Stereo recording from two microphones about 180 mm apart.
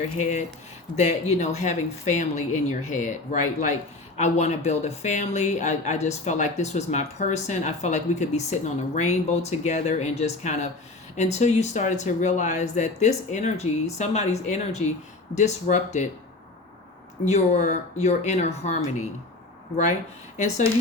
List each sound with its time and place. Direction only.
0.2 s speech: 40° left (ahead or behind)
17.2 s speech: 40° left (ahead or behind)
20.3 s speech: 40° left (ahead or behind)